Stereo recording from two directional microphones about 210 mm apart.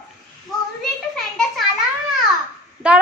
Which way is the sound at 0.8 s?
Centre (ahead or behind).